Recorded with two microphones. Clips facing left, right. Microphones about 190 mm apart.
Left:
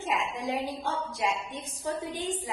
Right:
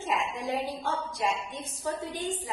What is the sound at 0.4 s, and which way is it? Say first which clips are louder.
A woman's voice: even; 15° left (ahead or behind).